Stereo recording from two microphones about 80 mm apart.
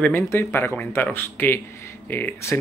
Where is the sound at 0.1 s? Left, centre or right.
Left.